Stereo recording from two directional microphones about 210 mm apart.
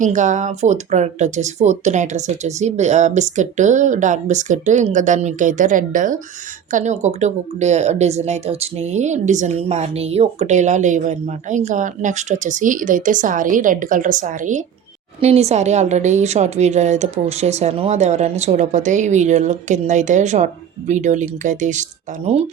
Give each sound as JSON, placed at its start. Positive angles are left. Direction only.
{"t": 0.0, "sound": "speech", "side_deg": -35}